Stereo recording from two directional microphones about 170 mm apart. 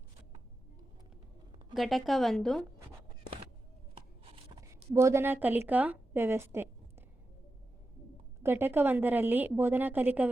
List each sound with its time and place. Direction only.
1.7 s a woman's voice: centre (ahead or behind)
4.2 s a sound: 35° right (ahead or behind)
4.9 s a woman's voice: 15° right (ahead or behind)
8.4 s a woman's voice: 10° right (ahead or behind)